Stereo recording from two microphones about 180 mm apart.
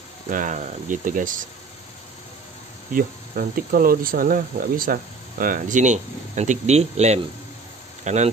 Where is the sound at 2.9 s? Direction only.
55° right (ahead or behind).